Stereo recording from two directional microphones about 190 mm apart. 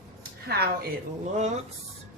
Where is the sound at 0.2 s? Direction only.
55° right (ahead or behind).